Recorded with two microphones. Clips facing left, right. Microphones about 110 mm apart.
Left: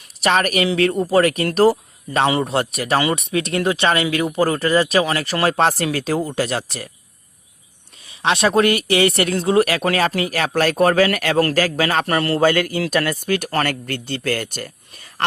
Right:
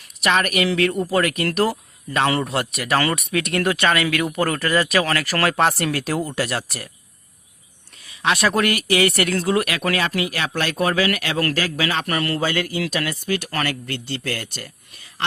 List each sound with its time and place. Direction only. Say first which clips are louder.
0.2 s speech: left 2 dB; 35° left (ahead or behind)
8.0 s speech: left 2 dB; 30° left (ahead or behind)
12.4 s speech: left 6 dB; 50° left (ahead or behind)